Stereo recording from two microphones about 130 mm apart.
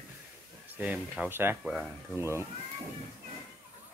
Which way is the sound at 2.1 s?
20° right (ahead or behind).